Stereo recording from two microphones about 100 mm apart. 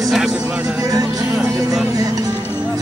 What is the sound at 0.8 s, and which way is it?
A man's voice, 40° right (ahead or behind).